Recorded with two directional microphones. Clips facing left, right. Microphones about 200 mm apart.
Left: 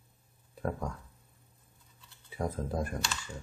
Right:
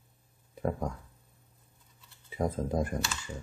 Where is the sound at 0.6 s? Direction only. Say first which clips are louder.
Right 3 dB; 15° right (ahead or behind).